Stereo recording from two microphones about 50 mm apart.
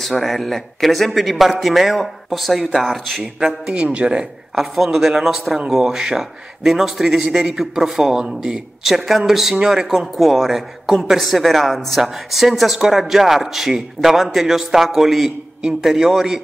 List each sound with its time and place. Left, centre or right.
0.0 s speech: centre
3.3 s a man's voice: centre
4.6 s a man's voice: centre